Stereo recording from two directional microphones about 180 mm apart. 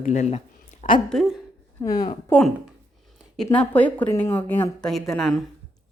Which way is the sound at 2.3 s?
5° left (ahead or behind).